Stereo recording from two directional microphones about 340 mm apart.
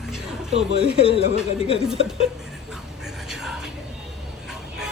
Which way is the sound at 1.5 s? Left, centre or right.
Centre.